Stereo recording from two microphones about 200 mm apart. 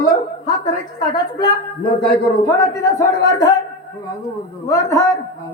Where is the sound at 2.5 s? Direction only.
15° left (ahead or behind).